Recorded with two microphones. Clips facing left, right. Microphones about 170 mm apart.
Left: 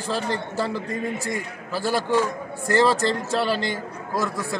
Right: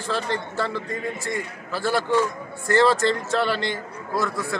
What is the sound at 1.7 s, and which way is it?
Speech, 15° left (ahead or behind).